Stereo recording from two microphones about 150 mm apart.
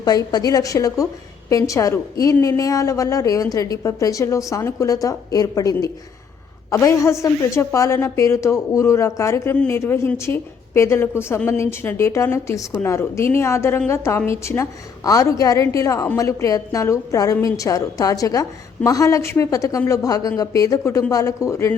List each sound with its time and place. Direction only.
0.0 s a woman's voice: 25° left (ahead or behind)